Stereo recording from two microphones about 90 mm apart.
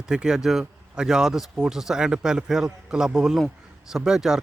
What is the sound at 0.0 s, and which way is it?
Speech, 10° right (ahead or behind).